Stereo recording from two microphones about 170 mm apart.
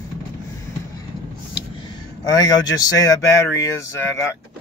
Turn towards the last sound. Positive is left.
turn(degrees=20)  # may be behind; listen again after turning